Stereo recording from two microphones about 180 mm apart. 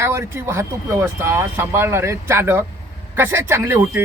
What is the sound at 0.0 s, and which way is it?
Speech, 15° right (ahead or behind).